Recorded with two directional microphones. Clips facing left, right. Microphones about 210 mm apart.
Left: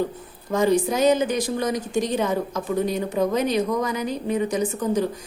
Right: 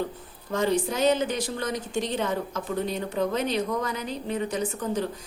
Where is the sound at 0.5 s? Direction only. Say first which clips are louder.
Left 5 dB; 15° left (ahead or behind).